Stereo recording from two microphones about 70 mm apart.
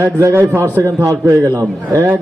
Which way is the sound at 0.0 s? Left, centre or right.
Right.